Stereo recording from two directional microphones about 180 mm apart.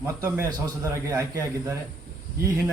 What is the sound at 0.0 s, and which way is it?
Speech, 10° right (ahead or behind).